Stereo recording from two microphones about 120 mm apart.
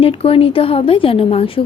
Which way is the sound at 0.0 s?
50° left (ahead or behind).